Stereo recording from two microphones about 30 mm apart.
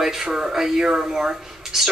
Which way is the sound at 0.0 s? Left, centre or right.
Centre.